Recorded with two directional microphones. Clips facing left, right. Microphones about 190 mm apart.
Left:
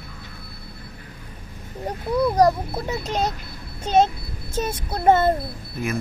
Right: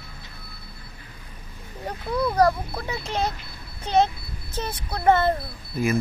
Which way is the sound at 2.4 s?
20° left (ahead or behind).